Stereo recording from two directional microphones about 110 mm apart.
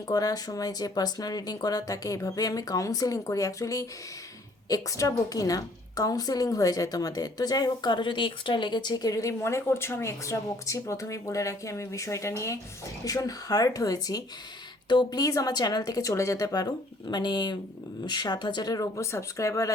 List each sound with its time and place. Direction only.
0.1 s a woman's voice: 35° left (ahead or behind)